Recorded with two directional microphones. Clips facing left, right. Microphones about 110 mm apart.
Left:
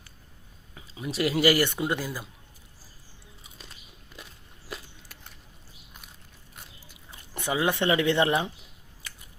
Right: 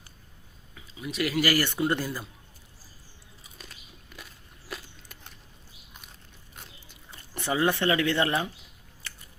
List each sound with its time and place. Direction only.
0.7 s speech: 35° left (ahead or behind); by 2.2 s 10° left (ahead or behind)
3.6 s biting: 25° left (ahead or behind)
6.9 s speech: 10° left (ahead or behind)